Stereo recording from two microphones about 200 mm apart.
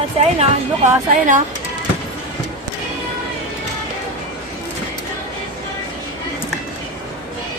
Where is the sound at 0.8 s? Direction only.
40° right (ahead or behind).